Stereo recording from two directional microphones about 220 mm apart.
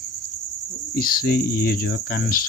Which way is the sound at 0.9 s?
40° left (ahead or behind).